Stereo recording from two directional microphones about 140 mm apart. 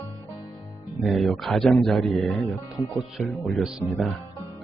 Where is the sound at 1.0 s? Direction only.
Centre (ahead or behind).